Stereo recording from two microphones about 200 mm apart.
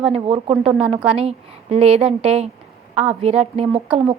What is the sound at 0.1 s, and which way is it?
Speech, 30° right (ahead or behind).